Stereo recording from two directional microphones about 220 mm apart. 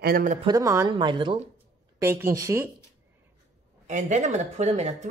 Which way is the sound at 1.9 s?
10° right (ahead or behind).